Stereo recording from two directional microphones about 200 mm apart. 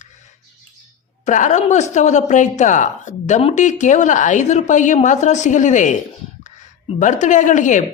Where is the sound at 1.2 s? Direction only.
35° left (ahead or behind).